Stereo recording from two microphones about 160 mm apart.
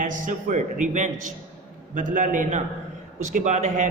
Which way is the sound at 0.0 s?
55° right (ahead or behind).